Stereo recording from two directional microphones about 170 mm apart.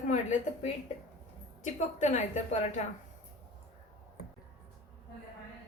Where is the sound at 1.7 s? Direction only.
45° left (ahead or behind).